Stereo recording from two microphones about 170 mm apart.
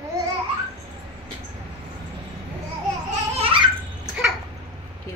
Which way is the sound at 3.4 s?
30° right (ahead or behind).